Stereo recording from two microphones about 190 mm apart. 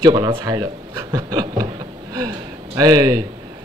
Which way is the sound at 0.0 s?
25° right (ahead or behind).